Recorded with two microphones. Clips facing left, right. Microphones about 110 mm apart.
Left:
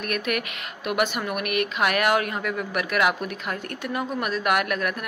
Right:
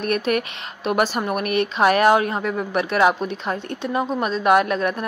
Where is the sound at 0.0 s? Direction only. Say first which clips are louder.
Right 6 dB; 30° right (ahead or behind).